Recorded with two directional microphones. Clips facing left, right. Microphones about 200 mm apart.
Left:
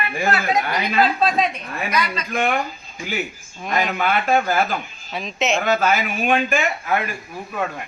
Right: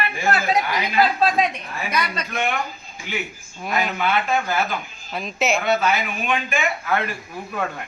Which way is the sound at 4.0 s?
45° left (ahead or behind).